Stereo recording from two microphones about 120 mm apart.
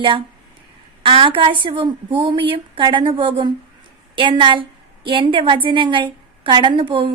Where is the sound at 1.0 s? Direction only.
45° right (ahead or behind).